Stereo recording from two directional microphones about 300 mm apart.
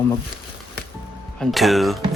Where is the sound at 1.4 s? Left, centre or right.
Centre.